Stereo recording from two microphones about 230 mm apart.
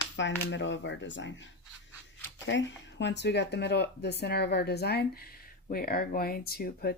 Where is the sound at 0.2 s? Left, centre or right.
Left.